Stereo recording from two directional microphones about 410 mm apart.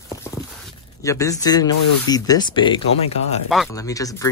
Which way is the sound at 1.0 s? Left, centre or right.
Centre.